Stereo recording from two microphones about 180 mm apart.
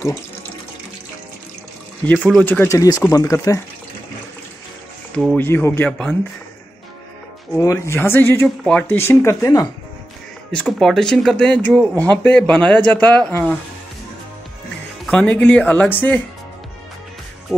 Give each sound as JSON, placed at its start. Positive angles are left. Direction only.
{"t": 2.1, "sound": "speech", "side_deg": 0}
{"t": 2.4, "sound": "speech", "side_deg": 10}
{"t": 5.1, "sound": "speech", "side_deg": 5}
{"t": 7.5, "sound": "speech", "side_deg": 15}
{"t": 10.5, "sound": "speech", "side_deg": 5}
{"t": 15.0, "sound": "speech", "side_deg": 5}